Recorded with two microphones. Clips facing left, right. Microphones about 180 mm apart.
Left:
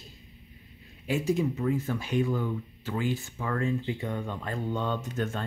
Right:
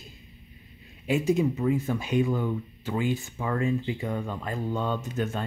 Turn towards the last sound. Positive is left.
turn(degrees=-10)  # may be behind; listen again after turning